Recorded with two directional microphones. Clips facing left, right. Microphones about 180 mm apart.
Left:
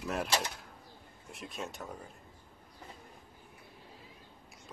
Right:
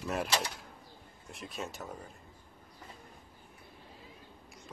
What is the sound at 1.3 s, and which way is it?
Speech, centre (ahead or behind).